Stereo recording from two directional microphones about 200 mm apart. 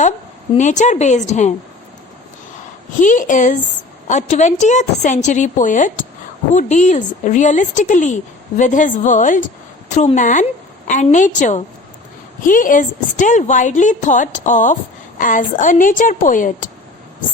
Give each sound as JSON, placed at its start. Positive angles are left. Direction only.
{"t": 0.5, "sound": "a woman's voice", "side_deg": 35}
{"t": 3.0, "sound": "a woman's voice", "side_deg": 40}